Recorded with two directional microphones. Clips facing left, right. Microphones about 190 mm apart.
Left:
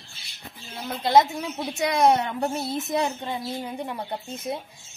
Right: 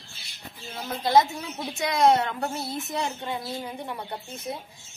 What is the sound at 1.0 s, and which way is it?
A woman's voice, 20° left (ahead or behind).